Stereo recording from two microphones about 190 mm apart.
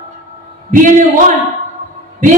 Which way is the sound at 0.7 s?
45° right (ahead or behind).